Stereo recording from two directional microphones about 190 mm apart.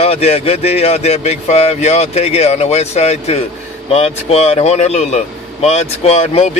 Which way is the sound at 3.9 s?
30° left (ahead or behind).